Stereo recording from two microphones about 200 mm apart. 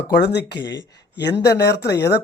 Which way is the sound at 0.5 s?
20° left (ahead or behind).